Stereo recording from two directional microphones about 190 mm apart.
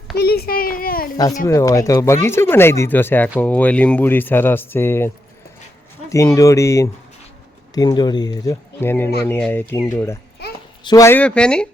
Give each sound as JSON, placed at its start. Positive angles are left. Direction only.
{"t": 0.2, "sound": "a child's voice", "side_deg": 55}
{"t": 1.1, "sound": "speech", "side_deg": 20}